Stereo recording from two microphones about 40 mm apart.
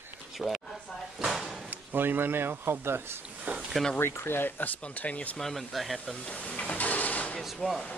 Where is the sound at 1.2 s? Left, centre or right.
Centre.